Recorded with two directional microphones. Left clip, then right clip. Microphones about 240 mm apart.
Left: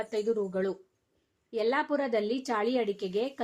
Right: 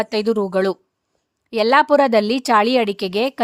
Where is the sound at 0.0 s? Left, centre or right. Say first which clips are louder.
Right 11 dB; right.